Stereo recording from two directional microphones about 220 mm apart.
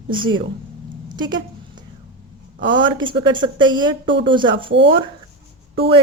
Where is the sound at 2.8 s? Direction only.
20° right (ahead or behind).